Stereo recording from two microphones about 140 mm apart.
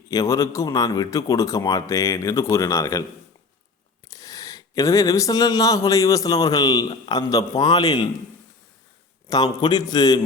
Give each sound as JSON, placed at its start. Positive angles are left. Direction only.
{"t": 0.1, "sound": "speech", "side_deg": 25}
{"t": 4.1, "sound": "speech", "side_deg": 25}
{"t": 9.3, "sound": "speech", "side_deg": 30}